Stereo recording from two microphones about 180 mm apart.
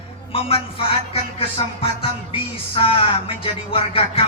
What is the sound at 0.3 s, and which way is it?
Music, 30° left (ahead or behind).